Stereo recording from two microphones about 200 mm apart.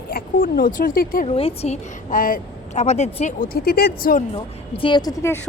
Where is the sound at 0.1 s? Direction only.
45° left (ahead or behind).